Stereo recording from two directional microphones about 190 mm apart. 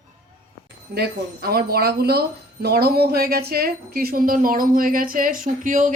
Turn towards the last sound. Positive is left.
turn(degrees=-45)  # may be behind; listen again after turning